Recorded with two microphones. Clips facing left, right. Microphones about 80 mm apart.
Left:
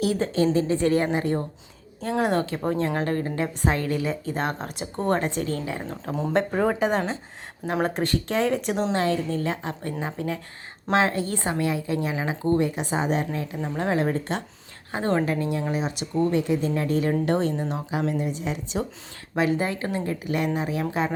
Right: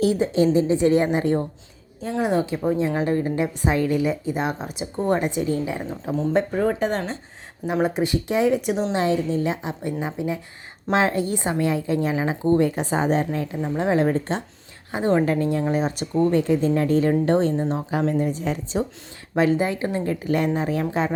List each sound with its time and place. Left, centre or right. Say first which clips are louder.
0.2 s a woman's voice: right 3 dB; centre
2.2 s speech: right 4 dB; centre
5.8 s speech: right 4 dB; centre
9.0 s a woman's voice: right 3 dB; centre
15.2 s a woman's voice: right 4 dB; right
17.9 s a woman's voice: right 3 dB; right
19.4 s a woman's voice: right 4 dB; right